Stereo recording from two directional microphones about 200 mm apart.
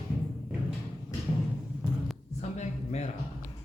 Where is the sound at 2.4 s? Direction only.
35° left (ahead or behind).